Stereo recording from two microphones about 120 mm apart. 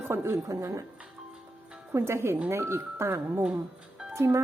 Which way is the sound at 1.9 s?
20° right (ahead or behind).